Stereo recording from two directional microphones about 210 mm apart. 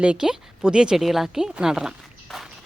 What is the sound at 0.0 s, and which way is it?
A woman's voice, 5° right (ahead or behind).